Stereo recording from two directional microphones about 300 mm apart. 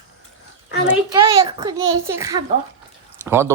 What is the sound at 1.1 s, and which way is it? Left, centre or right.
A man's voice, centre.